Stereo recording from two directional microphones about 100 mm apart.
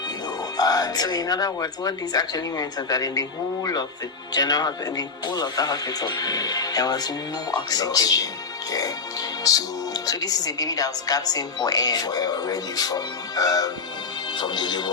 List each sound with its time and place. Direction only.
0.5 s speech: 40° left (ahead or behind)
9.4 s speech: 40° left (ahead or behind)